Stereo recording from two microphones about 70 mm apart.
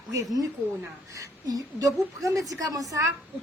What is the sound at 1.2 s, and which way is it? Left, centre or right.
A woman's voice, right.